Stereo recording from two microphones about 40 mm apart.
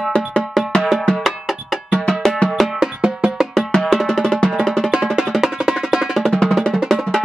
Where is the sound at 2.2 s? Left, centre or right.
Left.